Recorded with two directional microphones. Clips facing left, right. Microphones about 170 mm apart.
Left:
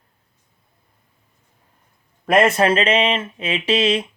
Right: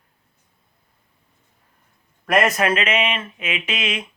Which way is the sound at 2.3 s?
25° left (ahead or behind).